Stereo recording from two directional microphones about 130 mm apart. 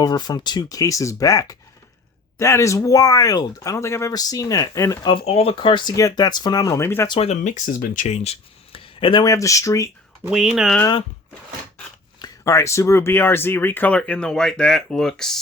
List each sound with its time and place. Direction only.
0.0 s speech: 30° left (ahead or behind)
5.0 s speech: 45° left (ahead or behind)
5.9 s speech: 25° left (ahead or behind)
7.1 s speech: 55° left (ahead or behind); by 8.1 s 85° left
8.1 s a sound: 55° left (ahead or behind)
9.2 s speech: 25° left (ahead or behind)
10.2 s speech: 5° right (ahead or behind)
12.2 s speech: 25° left (ahead or behind); by 15.4 s 5° left (ahead or behind)